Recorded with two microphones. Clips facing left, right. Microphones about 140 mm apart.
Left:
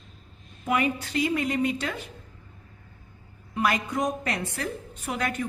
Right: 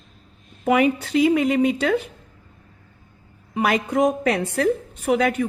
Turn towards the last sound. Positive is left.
turn(degrees=-75)  # may be behind; listen again after turning